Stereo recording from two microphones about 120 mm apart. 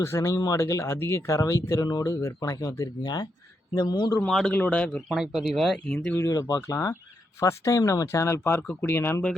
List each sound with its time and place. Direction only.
0.0 s speech: 25° left (ahead or behind)
4.3 s speech: 5° left (ahead or behind)
5.1 s speech: 5° right (ahead or behind)
6.1 s speech: 30° left (ahead or behind)